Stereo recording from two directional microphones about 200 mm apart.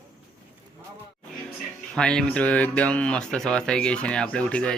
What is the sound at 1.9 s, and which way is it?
Speech, 5° left (ahead or behind).